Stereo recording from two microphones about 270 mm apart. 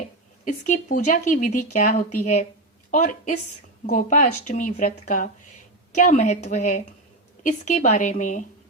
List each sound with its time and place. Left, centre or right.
0.4 s speech: left